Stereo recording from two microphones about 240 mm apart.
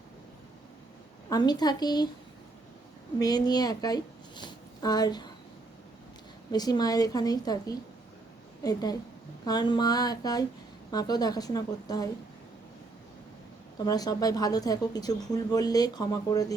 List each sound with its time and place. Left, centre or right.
1.3 s speech: centre
3.2 s speech: centre
6.5 s speech: centre
13.8 s speech: centre